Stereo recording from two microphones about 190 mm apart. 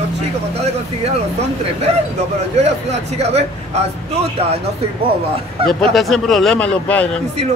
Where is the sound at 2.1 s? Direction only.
35° right (ahead or behind).